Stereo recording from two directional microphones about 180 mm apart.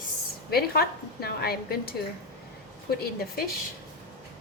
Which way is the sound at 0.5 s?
60° left (ahead or behind).